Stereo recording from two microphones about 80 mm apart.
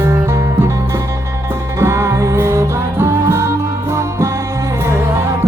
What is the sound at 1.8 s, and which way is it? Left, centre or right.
Music, right.